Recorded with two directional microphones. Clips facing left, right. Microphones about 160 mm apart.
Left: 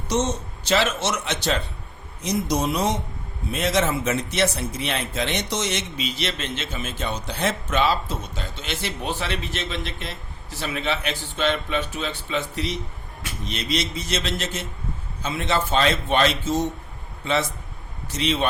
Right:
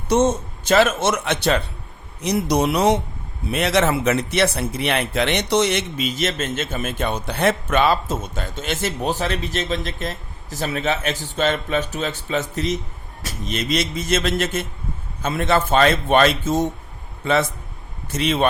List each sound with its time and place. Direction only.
0.1 s speech: 50° right (ahead or behind)
18.1 s speech: 50° right (ahead or behind)